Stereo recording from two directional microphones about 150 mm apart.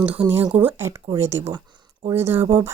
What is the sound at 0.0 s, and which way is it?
Speech, 10° right (ahead or behind).